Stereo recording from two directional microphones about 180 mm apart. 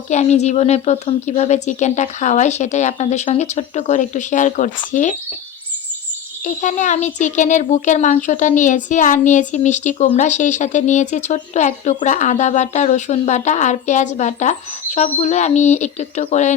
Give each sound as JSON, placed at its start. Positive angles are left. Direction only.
{"t": 0.1, "sound": "speech", "side_deg": 40}
{"t": 6.4, "sound": "speech", "side_deg": 40}